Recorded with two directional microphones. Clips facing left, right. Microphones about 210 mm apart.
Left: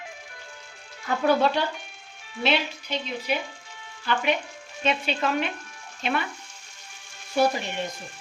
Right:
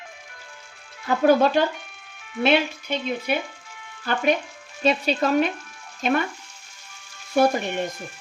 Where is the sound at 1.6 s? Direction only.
50° right (ahead or behind).